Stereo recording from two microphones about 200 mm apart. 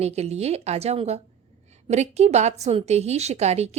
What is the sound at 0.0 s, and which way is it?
A woman's voice, 30° right (ahead or behind).